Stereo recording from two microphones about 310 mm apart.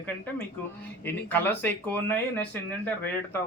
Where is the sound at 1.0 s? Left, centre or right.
Centre.